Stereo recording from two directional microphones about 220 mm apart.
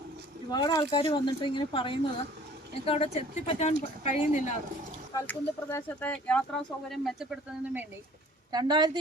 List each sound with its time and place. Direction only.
0.5 s speech: 20° left (ahead or behind)
5.1 s speech: 10° left (ahead or behind)
8.5 s a woman's voice: 20° right (ahead or behind)